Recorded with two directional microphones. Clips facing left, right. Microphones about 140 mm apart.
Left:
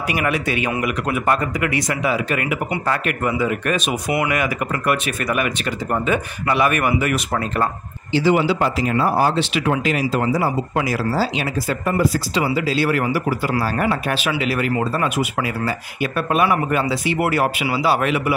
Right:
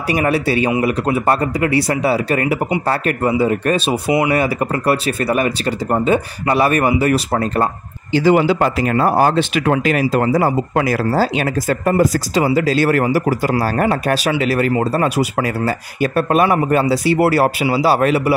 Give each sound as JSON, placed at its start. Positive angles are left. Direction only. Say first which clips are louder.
{"t": 0.1, "sound": "speech", "louder": "right 6 dB", "side_deg": -35}
{"t": 8.1, "sound": "speech", "louder": "right 4 dB", "side_deg": -45}